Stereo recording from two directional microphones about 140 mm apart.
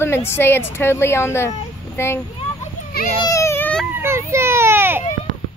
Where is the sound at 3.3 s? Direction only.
20° left (ahead or behind).